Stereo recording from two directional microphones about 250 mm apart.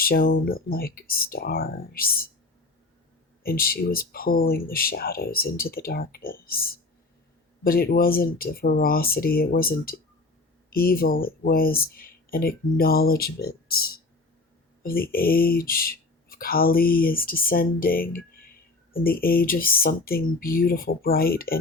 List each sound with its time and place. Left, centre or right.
0.0 s speech: left
3.4 s speech: left
18.2 s a sound: left
19.0 s speech: left